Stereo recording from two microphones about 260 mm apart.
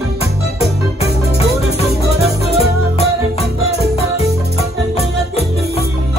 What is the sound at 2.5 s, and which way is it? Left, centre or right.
Music, left.